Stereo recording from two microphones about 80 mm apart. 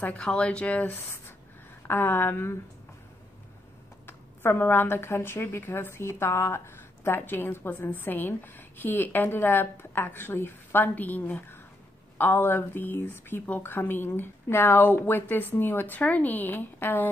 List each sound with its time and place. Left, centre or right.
0.2 s speech: centre
1.0 s speech: left
4.0 s speech: left